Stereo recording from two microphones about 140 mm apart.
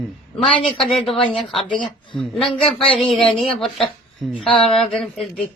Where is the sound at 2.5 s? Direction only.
40° left (ahead or behind).